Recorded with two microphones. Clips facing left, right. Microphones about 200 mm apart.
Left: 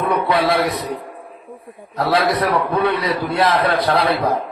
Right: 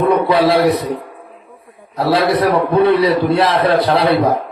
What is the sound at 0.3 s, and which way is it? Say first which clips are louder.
Speech: right 5 dB; 35° right (ahead or behind).